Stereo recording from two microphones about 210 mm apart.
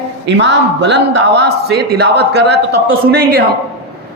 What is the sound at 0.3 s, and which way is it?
A man's voice, 60° right (ahead or behind).